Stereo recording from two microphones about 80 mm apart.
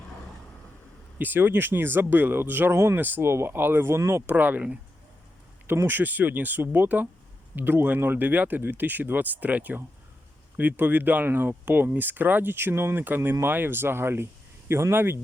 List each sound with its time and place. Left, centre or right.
1.2 s speech: right
4.3 s speech: right